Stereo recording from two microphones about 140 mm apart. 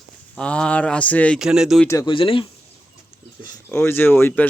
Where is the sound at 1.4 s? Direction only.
5° right (ahead or behind).